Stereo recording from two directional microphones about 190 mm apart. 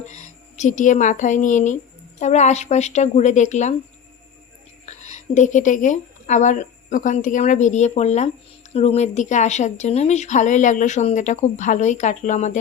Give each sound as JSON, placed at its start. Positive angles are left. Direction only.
{"t": 0.0, "sound": "speech", "side_deg": 40}
{"t": 4.9, "sound": "speech", "side_deg": 35}